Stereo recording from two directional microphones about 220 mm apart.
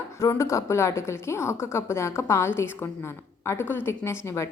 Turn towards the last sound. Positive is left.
turn(degrees=15)  # may be behind; listen again after turning